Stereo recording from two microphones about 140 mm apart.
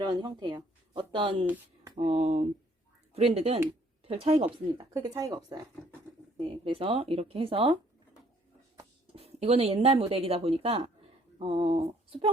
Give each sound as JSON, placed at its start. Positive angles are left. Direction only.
{"t": 0.0, "sound": "speech", "side_deg": -30}
{"t": 2.0, "sound": "speech", "side_deg": -50}
{"t": 5.0, "sound": "speech", "side_deg": -25}
{"t": 6.3, "sound": "speech", "side_deg": -40}
{"t": 9.1, "sound": "speech", "side_deg": -45}